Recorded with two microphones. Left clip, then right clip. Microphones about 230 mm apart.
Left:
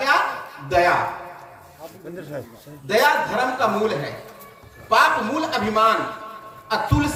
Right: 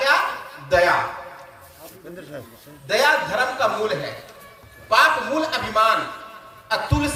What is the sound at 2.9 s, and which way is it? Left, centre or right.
A woman's voice, right.